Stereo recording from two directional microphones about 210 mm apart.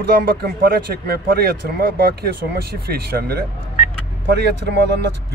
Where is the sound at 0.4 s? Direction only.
45° right (ahead or behind).